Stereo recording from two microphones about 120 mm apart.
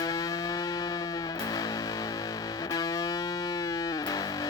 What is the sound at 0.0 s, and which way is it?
Music, 30° left (ahead or behind).